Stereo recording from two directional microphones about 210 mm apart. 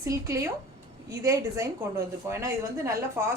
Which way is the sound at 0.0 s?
15° right (ahead or behind).